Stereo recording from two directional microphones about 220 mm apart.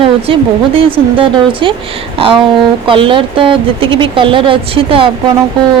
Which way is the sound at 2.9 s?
25° right (ahead or behind).